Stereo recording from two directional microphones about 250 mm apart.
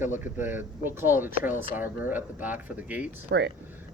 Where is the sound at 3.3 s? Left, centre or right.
Right.